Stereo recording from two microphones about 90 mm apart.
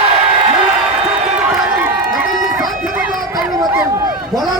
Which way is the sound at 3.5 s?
40° right (ahead or behind).